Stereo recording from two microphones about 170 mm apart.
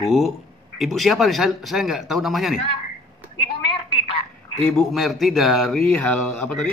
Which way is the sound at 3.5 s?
30° left (ahead or behind).